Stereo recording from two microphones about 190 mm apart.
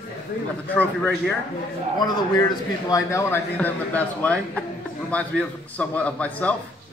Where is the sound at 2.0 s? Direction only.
20° left (ahead or behind).